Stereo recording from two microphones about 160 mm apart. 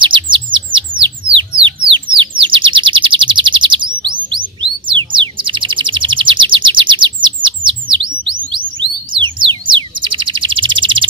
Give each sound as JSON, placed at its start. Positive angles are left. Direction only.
{"t": 0.0, "sound": "chirp", "side_deg": -30}
{"t": 1.8, "sound": "bird", "side_deg": -30}